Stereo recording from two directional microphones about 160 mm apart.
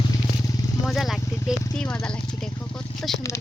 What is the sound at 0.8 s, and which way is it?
Speech, centre (ahead or behind).